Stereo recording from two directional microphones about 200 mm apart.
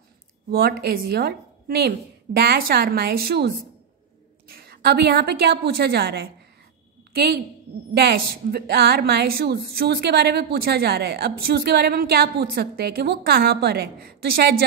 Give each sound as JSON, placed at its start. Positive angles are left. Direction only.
{"t": 0.5, "sound": "a woman's voice", "side_deg": -50}